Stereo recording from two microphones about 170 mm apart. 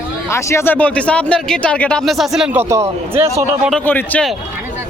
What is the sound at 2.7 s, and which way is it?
Speech, 15° right (ahead or behind).